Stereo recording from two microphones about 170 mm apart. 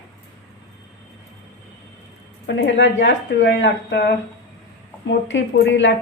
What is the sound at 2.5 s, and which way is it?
A woman's voice, 90° left.